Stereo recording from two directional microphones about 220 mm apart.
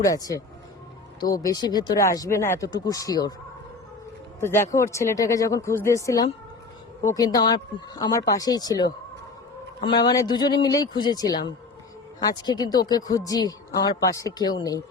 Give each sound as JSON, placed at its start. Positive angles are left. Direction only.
{"t": 0.0, "sound": "speech", "side_deg": 15}
{"t": 4.4, "sound": "speech", "side_deg": 10}